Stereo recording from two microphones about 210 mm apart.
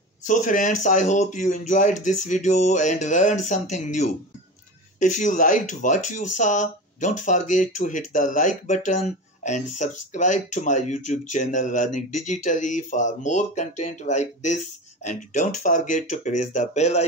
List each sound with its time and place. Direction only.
0.2 s speech: 35° left (ahead or behind)